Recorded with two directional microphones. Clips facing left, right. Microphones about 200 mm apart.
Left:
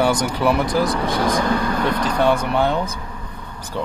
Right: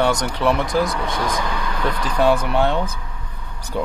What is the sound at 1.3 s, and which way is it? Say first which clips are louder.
Speech: left 6 dB; 45° left (ahead or behind).